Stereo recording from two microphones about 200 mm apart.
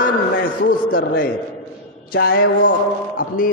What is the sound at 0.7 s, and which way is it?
Speech, 45° left (ahead or behind).